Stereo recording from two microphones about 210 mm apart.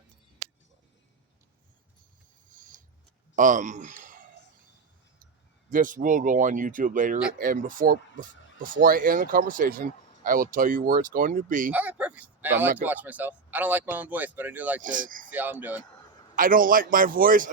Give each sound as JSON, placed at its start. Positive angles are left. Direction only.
{"t": 2.5, "sound": "a sound", "side_deg": -40}
{"t": 3.3, "sound": "speech", "side_deg": -35}
{"t": 5.7, "sound": "speech", "side_deg": -40}
{"t": 11.7, "sound": "speech", "side_deg": -5}
{"t": 14.8, "sound": "speech", "side_deg": -40}
{"t": 15.3, "sound": "speech", "side_deg": -10}
{"t": 16.3, "sound": "speech", "side_deg": -40}